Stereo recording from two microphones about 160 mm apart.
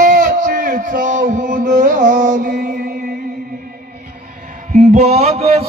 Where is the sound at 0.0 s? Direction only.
55° right (ahead or behind).